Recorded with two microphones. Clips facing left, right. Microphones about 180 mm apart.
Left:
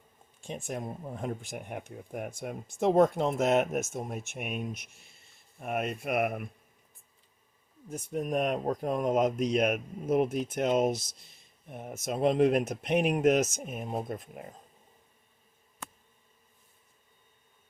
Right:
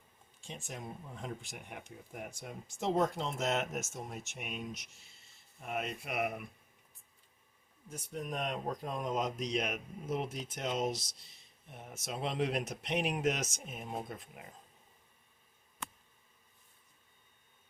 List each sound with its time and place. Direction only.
0.4 s speech: 55° left (ahead or behind)
7.9 s speech: 50° left (ahead or behind)